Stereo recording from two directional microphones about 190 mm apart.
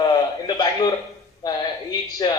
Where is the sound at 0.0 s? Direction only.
25° left (ahead or behind).